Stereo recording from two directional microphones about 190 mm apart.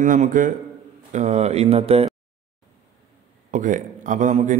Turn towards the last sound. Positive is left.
turn(degrees=-40)  # may be behind; listen again after turning